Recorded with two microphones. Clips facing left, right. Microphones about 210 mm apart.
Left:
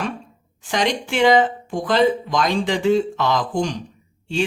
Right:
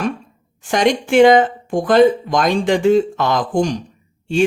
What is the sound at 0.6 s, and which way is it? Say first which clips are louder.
Speech: right 6 dB; 50° right (ahead or behind).